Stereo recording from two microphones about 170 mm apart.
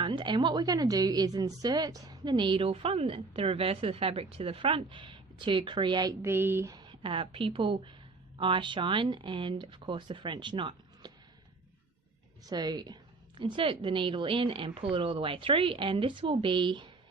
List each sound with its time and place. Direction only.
0.0 s a woman's voice: 25° right (ahead or behind)
12.5 s a woman's voice: 25° right (ahead or behind)